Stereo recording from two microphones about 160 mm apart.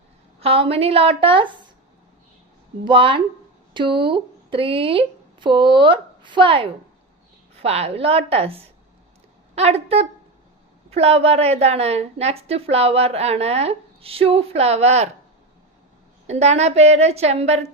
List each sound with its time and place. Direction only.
0.3 s a woman's voice: 35° right (ahead or behind)
2.8 s a woman's voice: 30° right (ahead or behind)
16.2 s a woman's voice: 45° right (ahead or behind)